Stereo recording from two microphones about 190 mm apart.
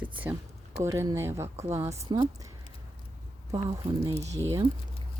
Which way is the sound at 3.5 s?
15° right (ahead or behind).